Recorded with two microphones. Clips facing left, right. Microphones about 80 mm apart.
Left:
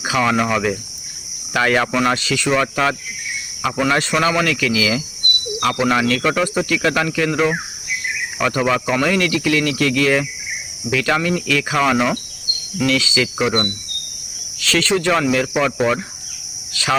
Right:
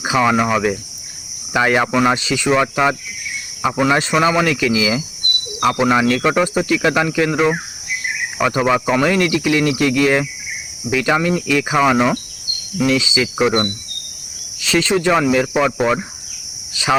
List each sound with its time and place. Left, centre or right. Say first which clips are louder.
0.0 s speech: right 2 dB; centre